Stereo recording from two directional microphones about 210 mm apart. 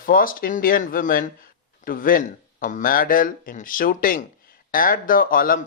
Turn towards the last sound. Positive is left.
turn(degrees=40)  # may be behind; listen again after turning